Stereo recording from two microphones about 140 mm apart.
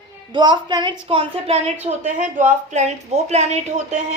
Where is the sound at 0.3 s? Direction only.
35° right (ahead or behind).